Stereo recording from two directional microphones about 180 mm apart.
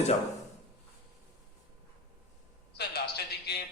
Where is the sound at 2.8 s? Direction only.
65° left (ahead or behind).